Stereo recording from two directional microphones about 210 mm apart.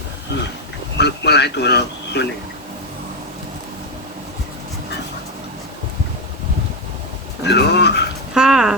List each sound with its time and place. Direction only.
0.9 s speech: 55° left (ahead or behind)
7.4 s a sound: 55° left (ahead or behind)
8.3 s dog: 5° right (ahead or behind)